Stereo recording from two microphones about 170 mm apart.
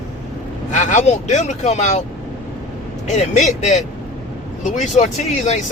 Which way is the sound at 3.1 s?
45° left (ahead or behind).